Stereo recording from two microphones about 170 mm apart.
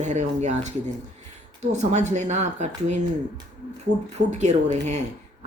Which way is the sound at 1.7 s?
45° right (ahead or behind).